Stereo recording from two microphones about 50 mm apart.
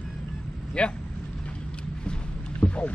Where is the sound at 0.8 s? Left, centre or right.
Left.